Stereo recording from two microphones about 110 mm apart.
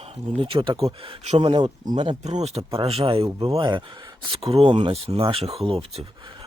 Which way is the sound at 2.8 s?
60° right (ahead or behind).